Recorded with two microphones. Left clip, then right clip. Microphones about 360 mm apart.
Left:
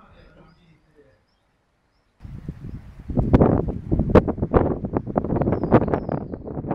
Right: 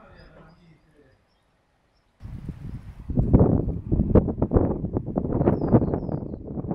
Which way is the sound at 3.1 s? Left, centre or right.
Left.